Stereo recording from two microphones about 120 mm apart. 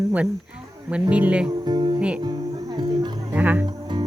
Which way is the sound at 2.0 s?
10° right (ahead or behind).